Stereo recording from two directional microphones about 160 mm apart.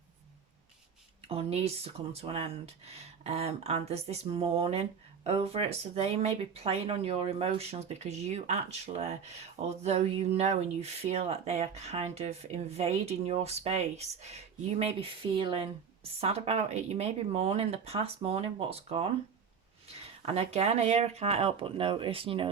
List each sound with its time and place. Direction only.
1.3 s speech: 40° right (ahead or behind)
15.4 s speech: 35° right (ahead or behind)